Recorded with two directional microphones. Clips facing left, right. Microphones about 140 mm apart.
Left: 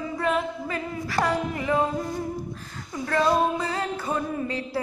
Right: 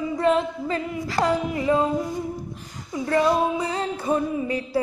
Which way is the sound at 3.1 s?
15° right (ahead or behind).